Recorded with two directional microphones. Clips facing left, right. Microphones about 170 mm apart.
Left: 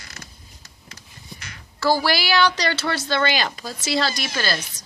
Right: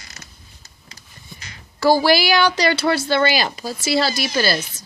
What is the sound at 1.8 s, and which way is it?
Speech, 15° right (ahead or behind).